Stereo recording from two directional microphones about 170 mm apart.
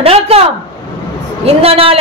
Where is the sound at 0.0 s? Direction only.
35° right (ahead or behind).